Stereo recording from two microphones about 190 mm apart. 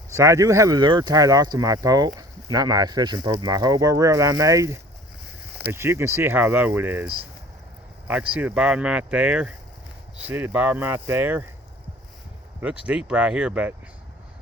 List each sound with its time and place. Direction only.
0.1 s speech: 15° right (ahead or behind)
12.8 s speech: 5° right (ahead or behind)